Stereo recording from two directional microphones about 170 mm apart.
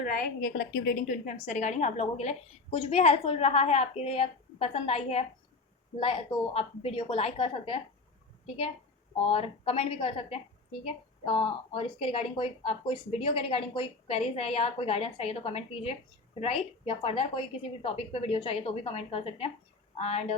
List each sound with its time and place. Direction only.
0.0 s a woman's voice: 55° left (ahead or behind); by 7.8 s 30° left (ahead or behind)
9.2 s a woman's voice: 35° left (ahead or behind)